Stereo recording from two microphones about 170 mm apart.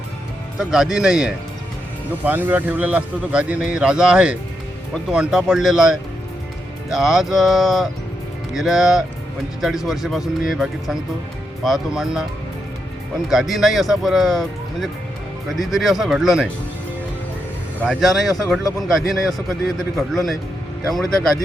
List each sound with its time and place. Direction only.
0.6 s speech: 5° right (ahead or behind)
13.3 s speech: centre (ahead or behind)
17.8 s speech: centre (ahead or behind)